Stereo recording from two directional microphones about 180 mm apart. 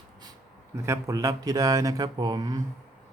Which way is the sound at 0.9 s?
20° right (ahead or behind).